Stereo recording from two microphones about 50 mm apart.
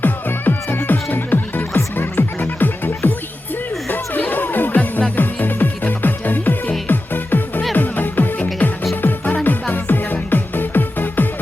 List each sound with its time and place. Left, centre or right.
0.0 s music: left